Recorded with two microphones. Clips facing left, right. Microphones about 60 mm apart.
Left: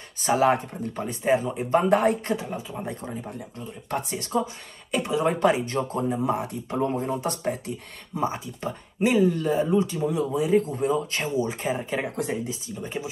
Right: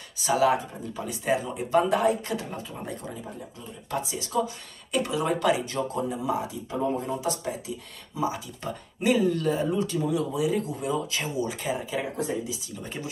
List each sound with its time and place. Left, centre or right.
0.2 s speech: left
1.2 s speech: left
2.3 s speech: centre
3.9 s speech: left
4.9 s speech: left
7.0 s speech: left
8.5 s speech: left
12.8 s speech: left